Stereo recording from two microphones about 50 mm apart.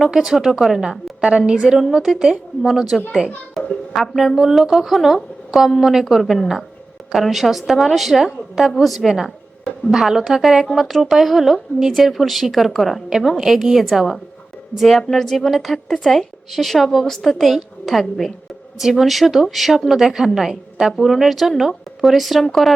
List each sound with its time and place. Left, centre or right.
0.1 s a woman's voice: centre
1.2 s a woman's voice: centre
10.7 s a woman's voice: centre